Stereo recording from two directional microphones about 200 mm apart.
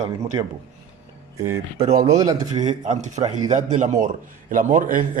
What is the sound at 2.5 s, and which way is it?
A man's voice, 35° right (ahead or behind).